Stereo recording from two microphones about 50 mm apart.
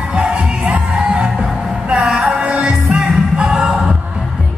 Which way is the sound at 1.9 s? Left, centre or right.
Centre.